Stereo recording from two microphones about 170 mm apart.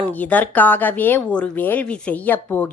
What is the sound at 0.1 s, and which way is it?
A woman's voice, 10° left (ahead or behind).